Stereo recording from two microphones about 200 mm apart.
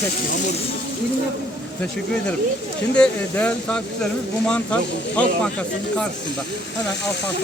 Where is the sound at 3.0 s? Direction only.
5° left (ahead or behind).